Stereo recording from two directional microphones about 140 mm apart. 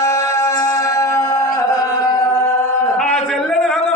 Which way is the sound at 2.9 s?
5° left (ahead or behind).